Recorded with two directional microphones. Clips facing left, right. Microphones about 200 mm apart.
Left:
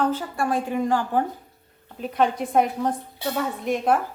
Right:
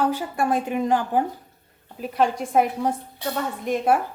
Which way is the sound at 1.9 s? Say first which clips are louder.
Even; centre (ahead or behind).